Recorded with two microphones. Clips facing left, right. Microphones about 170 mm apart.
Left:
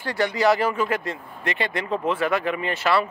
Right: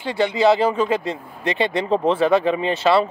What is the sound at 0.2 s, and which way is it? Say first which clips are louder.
Speech: right 4 dB; 25° right (ahead or behind).